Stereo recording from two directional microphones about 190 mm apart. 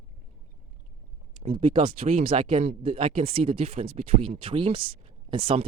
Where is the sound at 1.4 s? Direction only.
25° right (ahead or behind).